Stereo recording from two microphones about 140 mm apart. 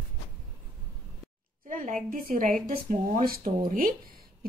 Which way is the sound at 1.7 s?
70° right (ahead or behind).